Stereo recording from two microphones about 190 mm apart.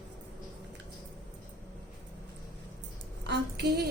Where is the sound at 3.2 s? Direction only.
60° right (ahead or behind).